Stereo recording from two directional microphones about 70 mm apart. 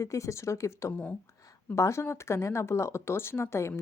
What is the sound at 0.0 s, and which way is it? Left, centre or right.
A woman's voice, left.